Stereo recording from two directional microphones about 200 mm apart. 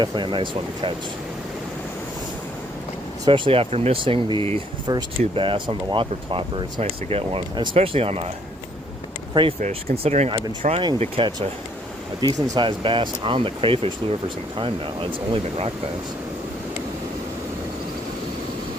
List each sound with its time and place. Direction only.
0.0 s speech: 25° right (ahead or behind)
3.2 s speech: 25° right (ahead or behind)
9.3 s speech: 25° right (ahead or behind)